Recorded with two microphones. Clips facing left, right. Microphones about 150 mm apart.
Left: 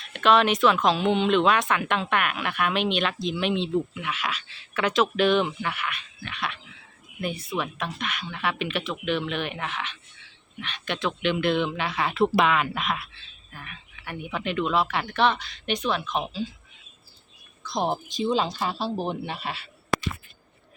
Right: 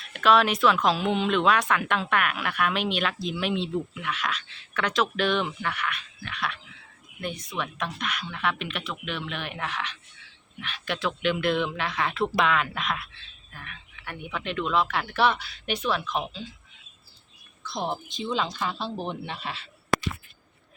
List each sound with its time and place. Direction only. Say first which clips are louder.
0.0 s speech: left 1 dB; centre (ahead or behind)
18.2 s speech: left 4 dB; 40° left (ahead or behind)
18.8 s speech: left 4 dB; 5° left (ahead or behind)